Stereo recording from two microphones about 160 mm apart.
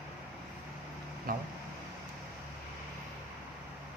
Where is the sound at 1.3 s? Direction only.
65° right (ahead or behind).